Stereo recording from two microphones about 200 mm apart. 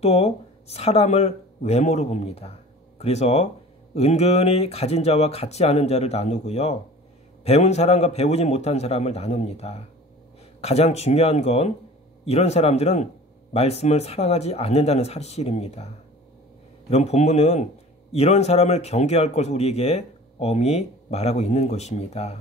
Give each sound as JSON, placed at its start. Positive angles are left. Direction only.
{"t": 0.0, "sound": "speech", "side_deg": 30}
{"t": 16.9, "sound": "speech", "side_deg": 35}